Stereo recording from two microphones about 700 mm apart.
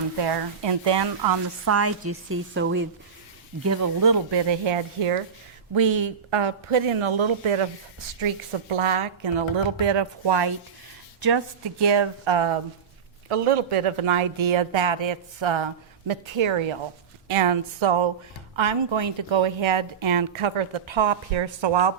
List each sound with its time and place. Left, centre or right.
0.2 s a woman's voice: right